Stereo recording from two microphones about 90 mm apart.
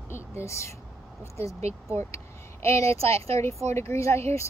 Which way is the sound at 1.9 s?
30° left (ahead or behind).